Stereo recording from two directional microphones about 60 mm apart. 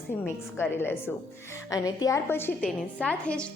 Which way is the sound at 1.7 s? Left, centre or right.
Left.